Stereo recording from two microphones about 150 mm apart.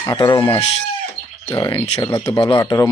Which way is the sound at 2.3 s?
30° left (ahead or behind).